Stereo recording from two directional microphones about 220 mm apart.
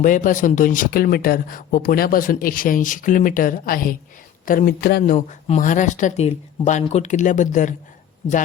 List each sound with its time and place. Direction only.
0.0 s speech: 35° left (ahead or behind)
5.1 s speech: 35° left (ahead or behind)